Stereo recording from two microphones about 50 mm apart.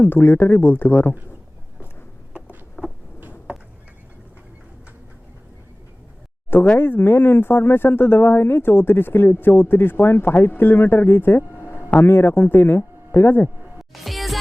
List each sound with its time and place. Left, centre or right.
0.0 s speech: left
2.8 s a sound: centre
6.7 s speech: left
13.7 s music: centre